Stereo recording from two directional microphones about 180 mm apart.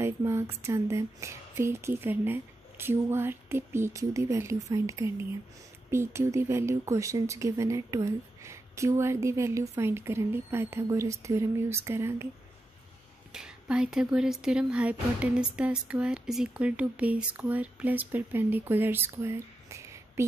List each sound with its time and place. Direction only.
0.0 s speech: 15° right (ahead or behind)
13.3 s speech: 5° right (ahead or behind)